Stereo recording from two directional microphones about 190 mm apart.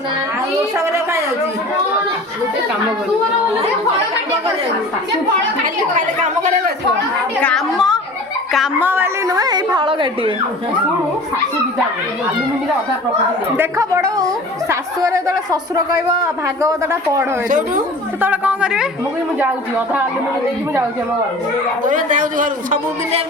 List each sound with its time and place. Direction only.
0.8 s a sound: 15° right (ahead or behind)
5.6 s a woman's voice: 45° right (ahead or behind)
7.4 s a woman's voice: centre (ahead or behind); by 10.3 s 25° right (ahead or behind)
13.6 s speech: 15° right (ahead or behind)
21.8 s a woman's voice: 45° right (ahead or behind)